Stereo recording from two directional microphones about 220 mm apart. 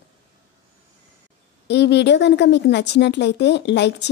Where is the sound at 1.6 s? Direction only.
50° left (ahead or behind).